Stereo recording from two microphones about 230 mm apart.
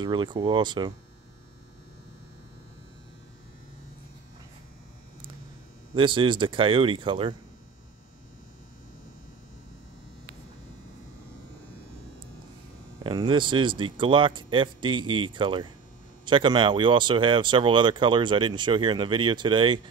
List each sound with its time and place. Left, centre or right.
0.0 s speech: centre
5.9 s speech: right
13.0 s speech: centre